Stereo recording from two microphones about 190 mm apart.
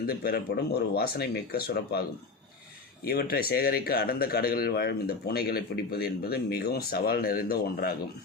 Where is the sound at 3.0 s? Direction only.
55° left (ahead or behind).